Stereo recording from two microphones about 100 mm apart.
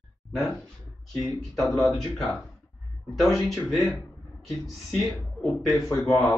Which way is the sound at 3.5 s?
Centre (ahead or behind).